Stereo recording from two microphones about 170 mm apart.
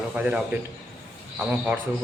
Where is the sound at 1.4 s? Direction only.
5° right (ahead or behind).